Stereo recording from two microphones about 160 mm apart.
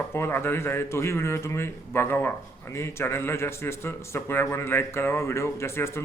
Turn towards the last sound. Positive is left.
turn(degrees=15)  # may be behind; listen again after turning